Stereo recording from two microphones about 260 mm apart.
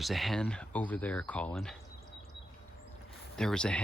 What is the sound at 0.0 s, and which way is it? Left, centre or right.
Speech, centre.